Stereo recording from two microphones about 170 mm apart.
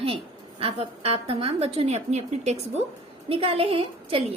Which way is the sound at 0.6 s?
35° right (ahead or behind).